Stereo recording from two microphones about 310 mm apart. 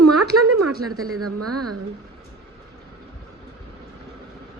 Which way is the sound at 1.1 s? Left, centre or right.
Right.